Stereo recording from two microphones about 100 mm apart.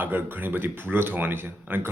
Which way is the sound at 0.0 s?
20° right (ahead or behind).